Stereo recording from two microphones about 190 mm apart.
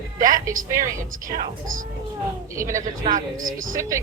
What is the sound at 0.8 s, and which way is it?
Speech, 45° right (ahead or behind).